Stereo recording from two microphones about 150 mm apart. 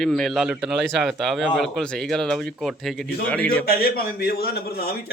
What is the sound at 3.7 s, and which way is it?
A man's voice, 85° left.